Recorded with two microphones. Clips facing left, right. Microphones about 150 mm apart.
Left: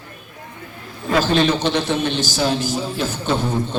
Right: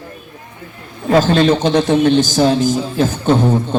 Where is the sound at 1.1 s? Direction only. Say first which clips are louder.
Right 5 dB; 45° right (ahead or behind).